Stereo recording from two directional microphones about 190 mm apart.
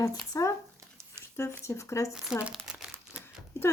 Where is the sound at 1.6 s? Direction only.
15° left (ahead or behind).